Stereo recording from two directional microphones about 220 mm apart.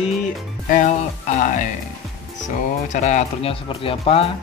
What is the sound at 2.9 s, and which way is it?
Speech, 30° left (ahead or behind).